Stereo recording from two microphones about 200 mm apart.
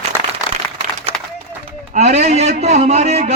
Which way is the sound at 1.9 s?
35° right (ahead or behind).